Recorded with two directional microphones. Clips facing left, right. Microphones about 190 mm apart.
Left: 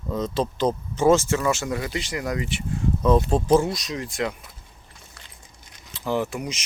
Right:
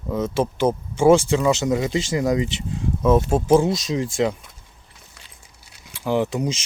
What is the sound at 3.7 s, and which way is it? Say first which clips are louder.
Speech: right 7 dB; 25° right (ahead or behind).